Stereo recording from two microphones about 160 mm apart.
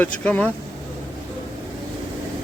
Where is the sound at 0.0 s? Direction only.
10° left (ahead or behind).